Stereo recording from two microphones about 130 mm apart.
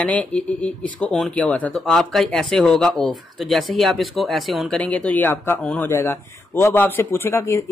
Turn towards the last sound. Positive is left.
turn(degrees=20)  # may be behind; listen again after turning